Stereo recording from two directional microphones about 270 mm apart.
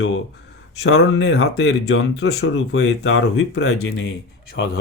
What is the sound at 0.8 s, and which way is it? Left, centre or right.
Speech, left.